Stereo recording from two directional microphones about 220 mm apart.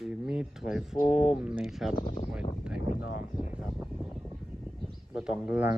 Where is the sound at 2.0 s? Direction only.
30° left (ahead or behind).